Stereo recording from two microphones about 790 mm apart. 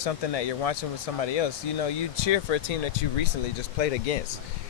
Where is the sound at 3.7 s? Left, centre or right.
Left.